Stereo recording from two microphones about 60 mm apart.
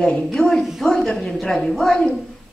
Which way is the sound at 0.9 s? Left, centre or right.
Centre.